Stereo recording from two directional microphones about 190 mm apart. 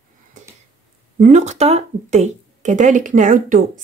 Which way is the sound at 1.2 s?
40° right (ahead or behind).